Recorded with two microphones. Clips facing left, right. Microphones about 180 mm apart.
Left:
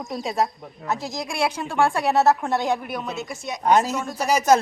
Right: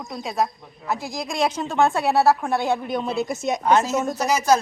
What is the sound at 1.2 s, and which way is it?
Speech, 10° left (ahead or behind).